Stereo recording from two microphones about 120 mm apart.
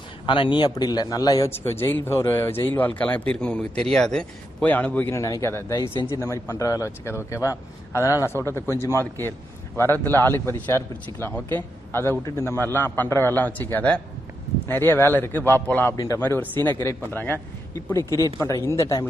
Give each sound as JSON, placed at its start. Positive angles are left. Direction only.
{"t": 0.3, "sound": "speech", "side_deg": 40}
{"t": 1.5, "sound": "speech", "side_deg": 20}
{"t": 5.1, "sound": "speech", "side_deg": 25}